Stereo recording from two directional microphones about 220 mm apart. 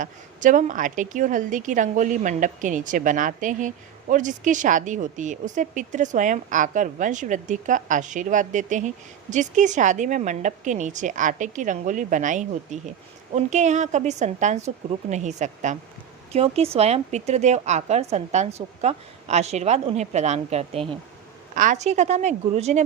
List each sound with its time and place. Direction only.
0.0 s a woman's voice: 35° right (ahead or behind)